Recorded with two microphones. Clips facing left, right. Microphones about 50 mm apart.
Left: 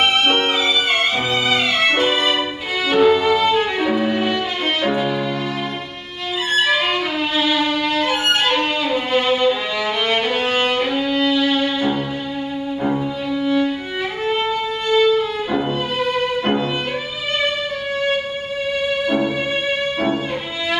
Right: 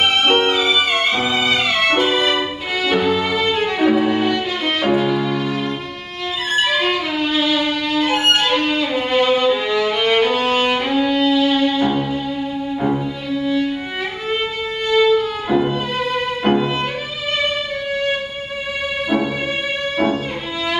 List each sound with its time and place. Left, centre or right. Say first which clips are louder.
0.0 s music: right 1 dB; centre
6.5 s violin: even; centre
10.7 s music: right 2 dB; centre
13.3 s violin: even; centre
15.5 s music: right 5 dB; centre
19.0 s music: right 2 dB; centre